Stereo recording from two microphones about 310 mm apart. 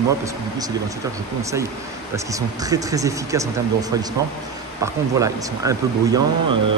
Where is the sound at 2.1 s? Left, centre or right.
Centre.